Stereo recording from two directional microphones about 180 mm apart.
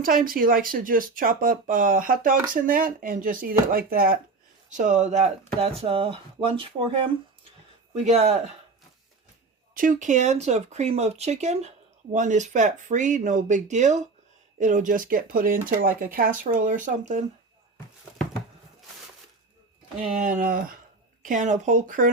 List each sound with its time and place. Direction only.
0.3 s speech: 55° right (ahead or behind); by 6.8 s 30° right (ahead or behind)
7.9 s speech: 35° right (ahead or behind)
9.7 s speech: 45° right (ahead or behind)
20.0 s speech: 45° right (ahead or behind)